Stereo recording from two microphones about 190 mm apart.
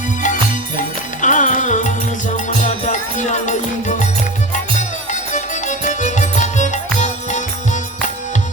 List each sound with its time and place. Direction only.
0.8 s music: 40° left (ahead or behind)